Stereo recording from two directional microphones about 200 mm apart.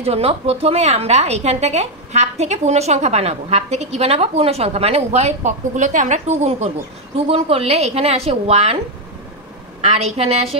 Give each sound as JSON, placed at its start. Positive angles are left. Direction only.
{"t": 0.0, "sound": "a woman's voice", "side_deg": -30}
{"t": 9.8, "sound": "a woman's voice", "side_deg": -30}